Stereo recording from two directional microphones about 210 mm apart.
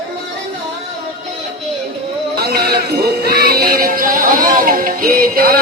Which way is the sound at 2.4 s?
45° right (ahead or behind).